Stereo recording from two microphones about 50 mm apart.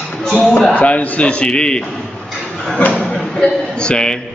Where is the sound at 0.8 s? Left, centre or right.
Left.